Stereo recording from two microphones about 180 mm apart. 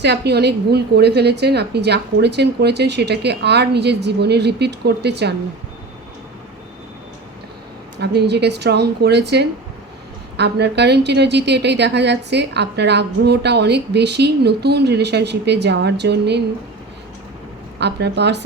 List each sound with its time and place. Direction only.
0.0 s a woman's voice: 65° right (ahead or behind)
7.9 s a woman's voice: 70° right (ahead or behind)
17.7 s a woman's voice: 70° right (ahead or behind)